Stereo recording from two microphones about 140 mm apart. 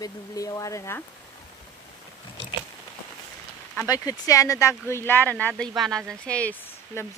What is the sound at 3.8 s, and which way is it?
Speech, 25° left (ahead or behind).